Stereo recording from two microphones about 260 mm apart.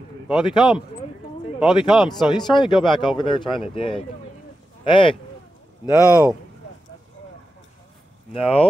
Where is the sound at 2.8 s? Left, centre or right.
Centre.